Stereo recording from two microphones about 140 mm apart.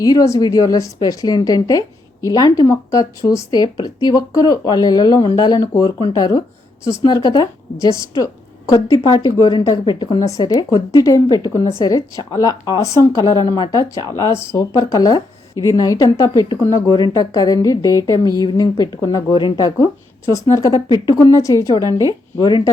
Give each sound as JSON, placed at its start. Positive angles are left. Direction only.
{"t": 0.0, "sound": "speech", "side_deg": 25}